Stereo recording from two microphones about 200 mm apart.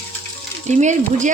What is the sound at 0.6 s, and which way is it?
Speech, 35° right (ahead or behind).